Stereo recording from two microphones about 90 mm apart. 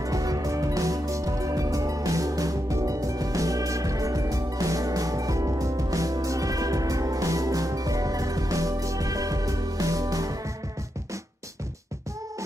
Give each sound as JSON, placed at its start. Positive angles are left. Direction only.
{"t": 0.0, "sound": "music", "side_deg": -40}